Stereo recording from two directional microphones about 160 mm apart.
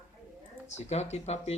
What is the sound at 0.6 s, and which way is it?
Speech, 45° left (ahead or behind).